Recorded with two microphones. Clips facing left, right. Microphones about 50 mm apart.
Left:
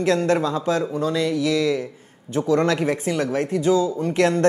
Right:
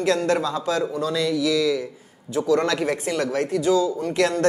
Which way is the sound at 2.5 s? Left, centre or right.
Left.